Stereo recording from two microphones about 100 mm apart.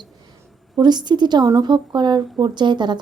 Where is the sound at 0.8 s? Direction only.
45° right (ahead or behind).